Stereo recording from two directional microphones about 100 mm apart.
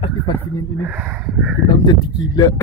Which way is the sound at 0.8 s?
20° right (ahead or behind).